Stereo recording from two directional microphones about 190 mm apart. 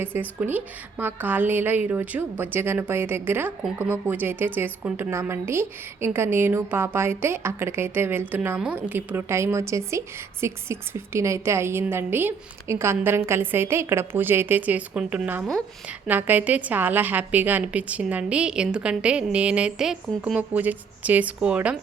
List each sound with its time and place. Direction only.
0.0 s a woman's voice: 10° right (ahead or behind)